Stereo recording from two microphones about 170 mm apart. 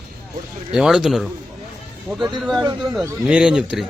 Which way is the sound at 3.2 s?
5° right (ahead or behind).